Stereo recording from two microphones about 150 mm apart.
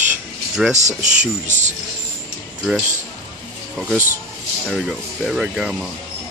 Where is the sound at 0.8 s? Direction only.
55° right (ahead or behind).